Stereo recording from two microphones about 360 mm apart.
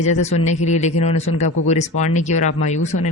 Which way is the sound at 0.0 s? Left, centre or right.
Centre.